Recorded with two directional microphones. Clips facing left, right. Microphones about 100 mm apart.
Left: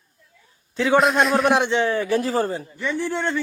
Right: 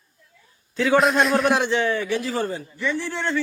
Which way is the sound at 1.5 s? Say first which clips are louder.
Left 1 dB; 20° left (ahead or behind).